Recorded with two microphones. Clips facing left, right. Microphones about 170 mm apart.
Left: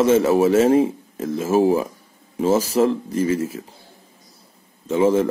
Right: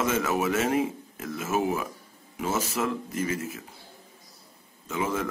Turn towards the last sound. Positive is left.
turn(degrees=30)  # may be behind; listen again after turning